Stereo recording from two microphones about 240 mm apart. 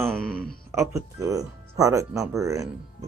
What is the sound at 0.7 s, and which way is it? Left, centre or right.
Speech, centre.